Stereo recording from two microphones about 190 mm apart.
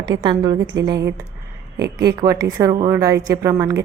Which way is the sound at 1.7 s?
60° right (ahead or behind).